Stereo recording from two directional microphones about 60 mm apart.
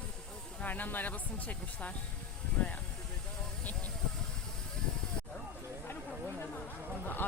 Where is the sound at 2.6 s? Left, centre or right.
Centre.